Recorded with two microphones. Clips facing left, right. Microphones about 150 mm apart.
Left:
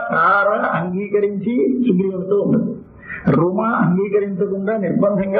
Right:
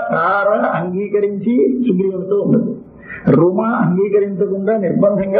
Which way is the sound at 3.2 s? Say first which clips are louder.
Right 4 dB; 30° right (ahead or behind).